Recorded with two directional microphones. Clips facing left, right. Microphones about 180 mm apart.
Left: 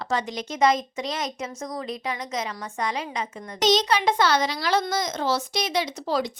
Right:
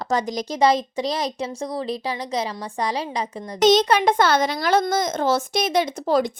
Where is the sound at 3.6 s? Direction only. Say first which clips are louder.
Right 5 dB; 50° right (ahead or behind).